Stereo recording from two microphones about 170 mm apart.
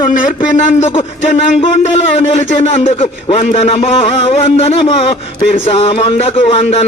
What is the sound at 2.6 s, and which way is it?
A man's voice, 35° left (ahead or behind).